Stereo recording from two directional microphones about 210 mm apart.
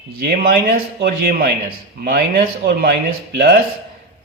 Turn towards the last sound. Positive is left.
turn(degrees=-50)  # may be behind; listen again after turning